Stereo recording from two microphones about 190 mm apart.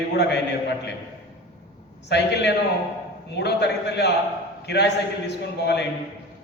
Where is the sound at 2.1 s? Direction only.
60° left (ahead or behind).